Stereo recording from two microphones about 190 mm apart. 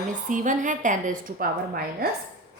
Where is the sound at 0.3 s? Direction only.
40° right (ahead or behind).